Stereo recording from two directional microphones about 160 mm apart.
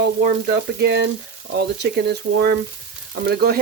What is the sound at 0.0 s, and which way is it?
Speech, 75° right (ahead or behind).